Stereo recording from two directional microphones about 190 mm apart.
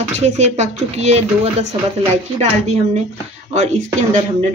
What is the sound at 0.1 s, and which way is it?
Speech, 35° right (ahead or behind).